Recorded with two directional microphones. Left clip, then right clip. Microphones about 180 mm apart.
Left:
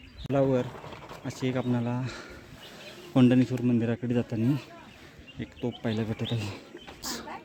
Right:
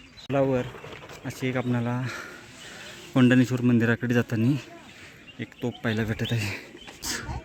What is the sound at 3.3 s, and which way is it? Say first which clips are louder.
Speech: right 3 dB; 15° right (ahead or behind).